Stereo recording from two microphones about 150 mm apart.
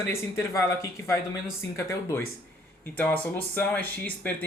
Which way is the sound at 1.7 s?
20° left (ahead or behind).